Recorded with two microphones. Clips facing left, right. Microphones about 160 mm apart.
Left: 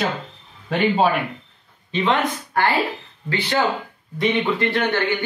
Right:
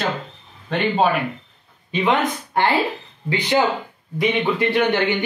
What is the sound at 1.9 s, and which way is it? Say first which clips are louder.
Speech: right 1 dB; 15° right (ahead or behind).